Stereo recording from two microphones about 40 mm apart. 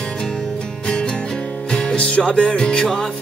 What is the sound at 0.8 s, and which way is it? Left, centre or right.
Music, centre.